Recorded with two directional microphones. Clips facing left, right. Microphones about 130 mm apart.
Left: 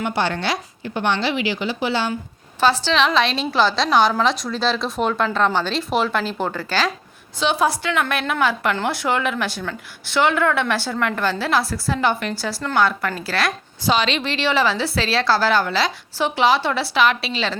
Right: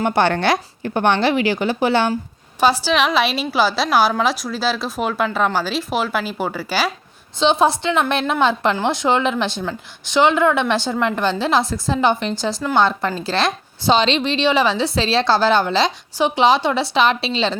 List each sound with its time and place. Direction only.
0.0 s a woman's voice: 50° right (ahead or behind)
2.6 s a woman's voice: 15° right (ahead or behind)
7.3 s a woman's voice: 25° right (ahead or behind)